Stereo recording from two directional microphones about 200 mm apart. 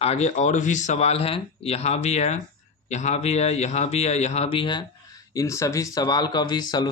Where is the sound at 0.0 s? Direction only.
35° left (ahead or behind).